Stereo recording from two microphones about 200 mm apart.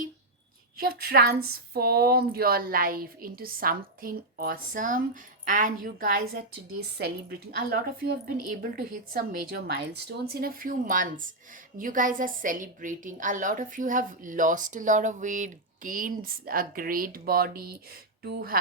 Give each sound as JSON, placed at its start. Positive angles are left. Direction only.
{"t": 0.9, "sound": "a woman's voice", "side_deg": -50}